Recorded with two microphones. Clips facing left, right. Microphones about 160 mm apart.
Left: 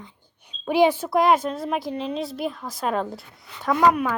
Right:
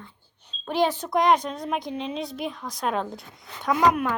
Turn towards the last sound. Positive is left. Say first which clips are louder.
# left 2 dB
turn(degrees=0)  # may be behind; listen again after turning